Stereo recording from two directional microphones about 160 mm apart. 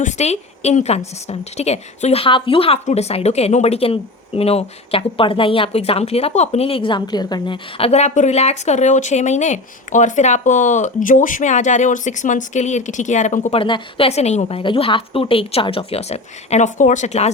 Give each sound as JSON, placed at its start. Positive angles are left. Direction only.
{"t": 0.0, "sound": "a woman's voice", "side_deg": 45}
{"t": 13.6, "sound": "a woman's voice", "side_deg": 30}